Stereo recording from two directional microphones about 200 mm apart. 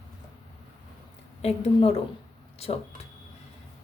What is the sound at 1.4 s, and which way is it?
A woman's voice, 30° left (ahead or behind).